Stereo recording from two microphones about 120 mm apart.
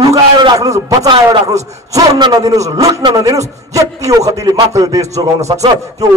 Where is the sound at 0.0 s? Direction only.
35° right (ahead or behind).